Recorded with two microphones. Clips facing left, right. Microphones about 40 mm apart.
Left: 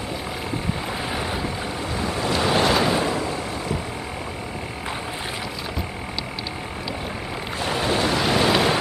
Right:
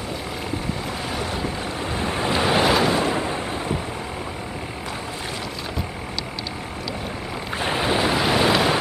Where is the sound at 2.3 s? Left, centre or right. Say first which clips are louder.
Right 1 dB; centre.